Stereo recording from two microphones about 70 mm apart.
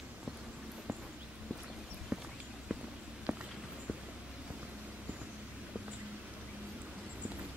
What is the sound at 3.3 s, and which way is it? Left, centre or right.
Walk, centre.